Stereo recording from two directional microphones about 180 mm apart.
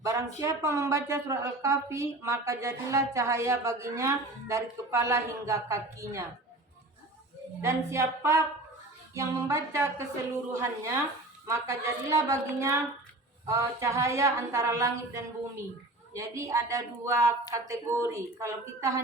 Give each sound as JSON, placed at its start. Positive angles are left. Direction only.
{"t": 0.0, "sound": "a woman's voice", "side_deg": -15}
{"t": 7.6, "sound": "a woman's voice", "side_deg": -15}